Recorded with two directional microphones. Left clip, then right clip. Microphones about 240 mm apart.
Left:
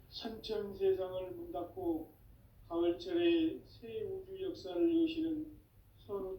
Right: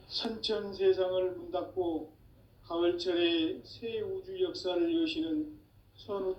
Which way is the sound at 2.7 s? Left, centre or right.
Right.